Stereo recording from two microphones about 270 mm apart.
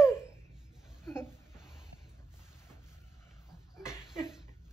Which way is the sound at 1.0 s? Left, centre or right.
Centre.